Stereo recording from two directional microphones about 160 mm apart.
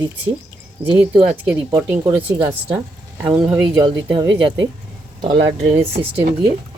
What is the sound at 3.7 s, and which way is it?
Speech, 30° right (ahead or behind).